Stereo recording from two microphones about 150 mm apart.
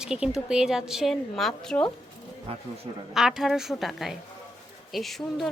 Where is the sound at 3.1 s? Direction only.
Centre (ahead or behind).